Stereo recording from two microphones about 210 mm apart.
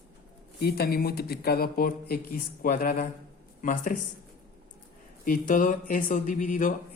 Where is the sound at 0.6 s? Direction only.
45° left (ahead or behind).